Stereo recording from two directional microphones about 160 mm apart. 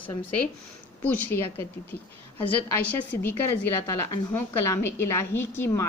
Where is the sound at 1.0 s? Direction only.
10° left (ahead or behind).